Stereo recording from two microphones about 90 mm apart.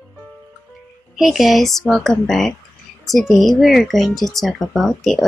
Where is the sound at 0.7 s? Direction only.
Centre (ahead or behind).